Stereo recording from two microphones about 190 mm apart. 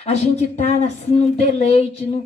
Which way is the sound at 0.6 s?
35° left (ahead or behind).